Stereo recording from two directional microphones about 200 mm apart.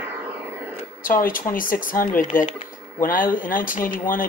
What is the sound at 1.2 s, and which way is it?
Speech, 45° left (ahead or behind).